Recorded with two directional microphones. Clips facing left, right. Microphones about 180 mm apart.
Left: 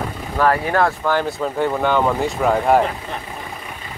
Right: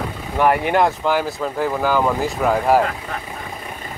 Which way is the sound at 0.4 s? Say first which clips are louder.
Right 1 dB; 15° right (ahead or behind).